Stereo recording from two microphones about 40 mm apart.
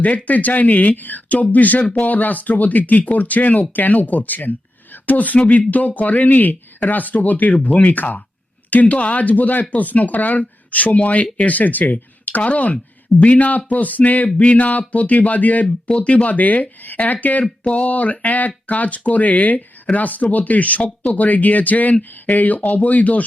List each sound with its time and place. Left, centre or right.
0.0 s speech: left